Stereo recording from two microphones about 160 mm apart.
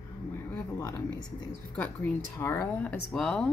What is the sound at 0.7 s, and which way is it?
Speech, 20° left (ahead or behind).